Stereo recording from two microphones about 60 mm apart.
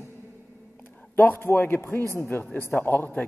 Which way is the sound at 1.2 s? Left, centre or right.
Left.